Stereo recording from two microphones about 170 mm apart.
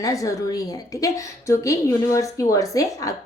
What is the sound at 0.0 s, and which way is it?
Speech, 20° left (ahead or behind).